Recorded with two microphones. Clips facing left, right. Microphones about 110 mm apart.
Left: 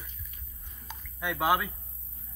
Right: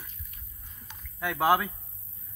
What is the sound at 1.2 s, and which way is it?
Speech, 5° left (ahead or behind).